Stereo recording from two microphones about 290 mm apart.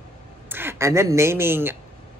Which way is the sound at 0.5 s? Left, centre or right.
Centre.